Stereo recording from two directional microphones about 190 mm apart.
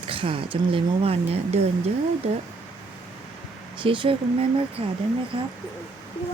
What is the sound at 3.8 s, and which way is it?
Speech, 25° right (ahead or behind).